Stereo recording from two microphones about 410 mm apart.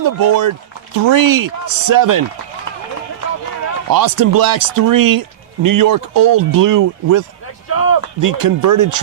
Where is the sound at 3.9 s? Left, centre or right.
Right.